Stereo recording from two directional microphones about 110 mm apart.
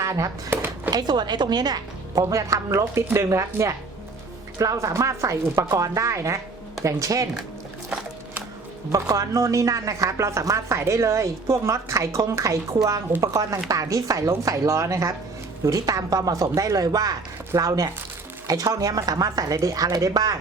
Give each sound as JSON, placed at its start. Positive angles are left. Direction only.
{"t": 0.0, "sound": "speech", "side_deg": -30}
{"t": 0.9, "sound": "a woman's voice", "side_deg": -40}
{"t": 8.9, "sound": "a woman's voice", "side_deg": -30}